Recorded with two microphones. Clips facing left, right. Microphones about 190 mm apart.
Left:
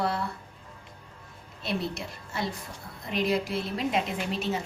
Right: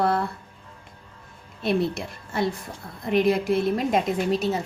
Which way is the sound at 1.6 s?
55° right (ahead or behind).